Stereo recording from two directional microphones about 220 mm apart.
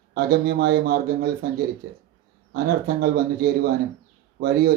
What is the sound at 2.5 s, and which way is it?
Speech, 45° right (ahead or behind).